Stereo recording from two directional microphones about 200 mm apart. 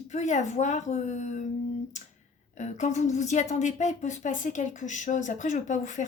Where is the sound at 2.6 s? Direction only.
35° left (ahead or behind).